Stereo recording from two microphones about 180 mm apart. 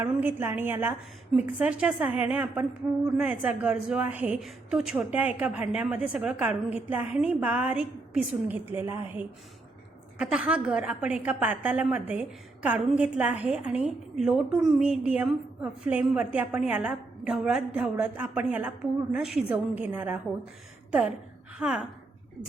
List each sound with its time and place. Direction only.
0.0 s a woman's voice: 10° right (ahead or behind)
21.6 s a woman's voice: 5° right (ahead or behind)